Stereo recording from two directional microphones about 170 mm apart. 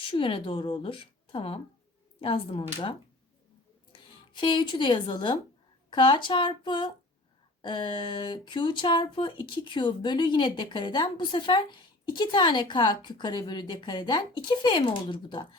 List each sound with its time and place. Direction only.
0.1 s speech: 30° left (ahead or behind)
4.3 s speech: 30° left (ahead or behind)